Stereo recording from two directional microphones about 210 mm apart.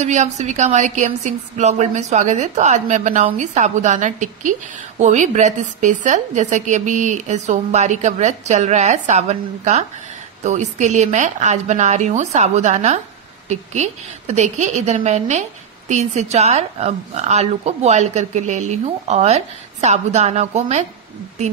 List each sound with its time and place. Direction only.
0.0 s a woman's voice: 35° right (ahead or behind)